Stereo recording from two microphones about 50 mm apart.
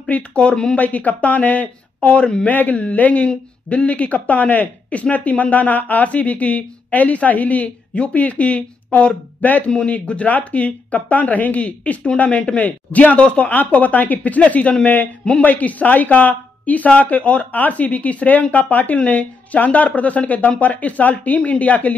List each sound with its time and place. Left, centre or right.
0.1 s speech: left
0.7 s speech: left
2.4 s speech: left
9.7 s speech: centre